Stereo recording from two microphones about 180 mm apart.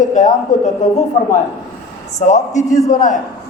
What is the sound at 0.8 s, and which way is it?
Speech, 40° left (ahead or behind).